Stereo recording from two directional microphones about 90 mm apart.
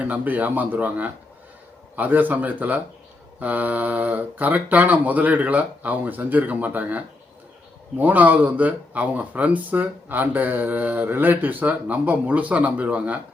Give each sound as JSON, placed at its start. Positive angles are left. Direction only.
{"t": 0.0, "sound": "speech", "side_deg": -15}